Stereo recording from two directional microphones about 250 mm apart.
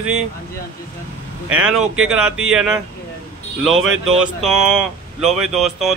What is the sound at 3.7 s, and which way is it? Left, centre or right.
Speech, right.